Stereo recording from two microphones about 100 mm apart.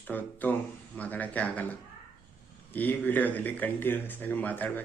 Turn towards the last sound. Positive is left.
turn(degrees=15)  # may be behind; listen again after turning